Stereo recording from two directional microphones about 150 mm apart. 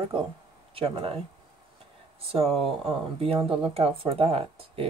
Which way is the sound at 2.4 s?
Centre (ahead or behind).